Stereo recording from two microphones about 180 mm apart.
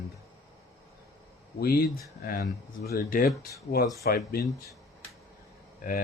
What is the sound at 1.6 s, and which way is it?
Speech, 60° left (ahead or behind).